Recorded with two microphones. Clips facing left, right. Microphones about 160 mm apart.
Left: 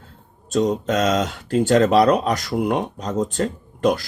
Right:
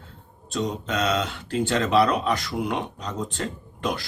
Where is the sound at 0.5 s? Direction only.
45° left (ahead or behind).